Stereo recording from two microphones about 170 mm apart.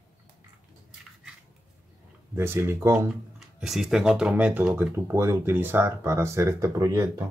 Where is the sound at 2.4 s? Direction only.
15° right (ahead or behind).